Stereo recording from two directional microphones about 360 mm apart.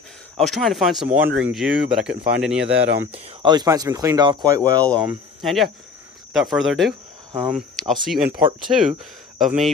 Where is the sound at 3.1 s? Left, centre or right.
Centre.